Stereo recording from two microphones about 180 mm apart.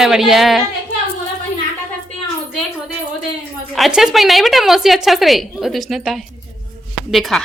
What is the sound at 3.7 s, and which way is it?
Speech, centre (ahead or behind).